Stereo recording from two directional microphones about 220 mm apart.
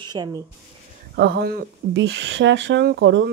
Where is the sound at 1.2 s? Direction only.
45° right (ahead or behind).